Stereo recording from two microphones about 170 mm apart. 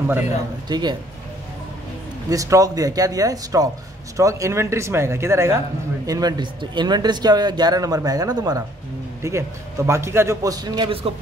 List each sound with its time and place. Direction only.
0.7 s speech: 25° right (ahead or behind)
2.2 s speech: 20° right (ahead or behind)